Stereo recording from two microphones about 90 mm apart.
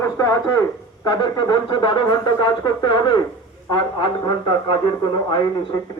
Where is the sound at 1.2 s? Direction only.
55° left (ahead or behind).